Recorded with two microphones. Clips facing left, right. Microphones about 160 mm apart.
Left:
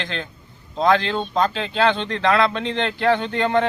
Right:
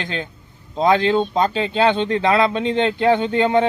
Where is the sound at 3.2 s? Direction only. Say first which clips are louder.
Right 3 dB; 10° right (ahead or behind).